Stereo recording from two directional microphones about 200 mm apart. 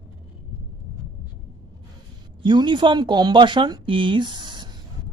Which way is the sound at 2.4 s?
25° right (ahead or behind).